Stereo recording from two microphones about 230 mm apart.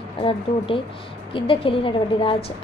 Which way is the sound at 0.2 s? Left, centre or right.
Left.